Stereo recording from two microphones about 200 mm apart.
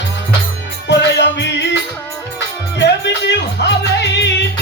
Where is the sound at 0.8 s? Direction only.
60° left (ahead or behind).